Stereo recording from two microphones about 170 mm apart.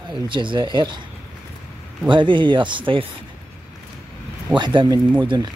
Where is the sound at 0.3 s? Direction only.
30° right (ahead or behind).